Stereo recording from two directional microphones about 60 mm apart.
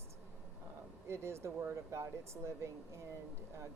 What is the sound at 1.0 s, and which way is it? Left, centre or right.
Speech, right.